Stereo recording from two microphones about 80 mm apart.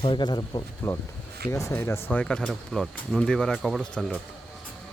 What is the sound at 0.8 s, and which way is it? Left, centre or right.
Speech, left.